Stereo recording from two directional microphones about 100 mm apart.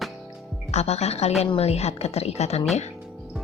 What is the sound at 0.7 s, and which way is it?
Speech, 90° left.